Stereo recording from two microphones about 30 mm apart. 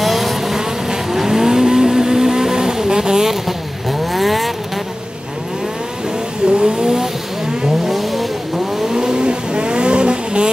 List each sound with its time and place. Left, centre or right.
0.0 s vehicle: centre
4.0 s vehicle: centre
6.4 s vehicle: right
7.9 s vehicle: centre
8.8 s vehicle: right